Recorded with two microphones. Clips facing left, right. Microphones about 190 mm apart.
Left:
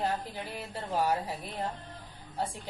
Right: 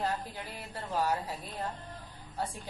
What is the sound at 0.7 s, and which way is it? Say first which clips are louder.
Music: left 2 dB; 25° left (ahead or behind).